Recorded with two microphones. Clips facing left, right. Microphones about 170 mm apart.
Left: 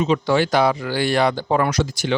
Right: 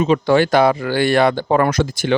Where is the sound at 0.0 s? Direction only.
55° right (ahead or behind).